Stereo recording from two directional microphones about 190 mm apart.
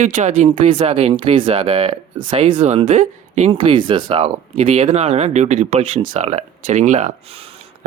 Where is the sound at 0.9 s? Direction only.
30° right (ahead or behind).